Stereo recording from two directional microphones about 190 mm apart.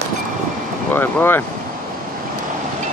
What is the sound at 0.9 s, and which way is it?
Speech, 10° left (ahead or behind).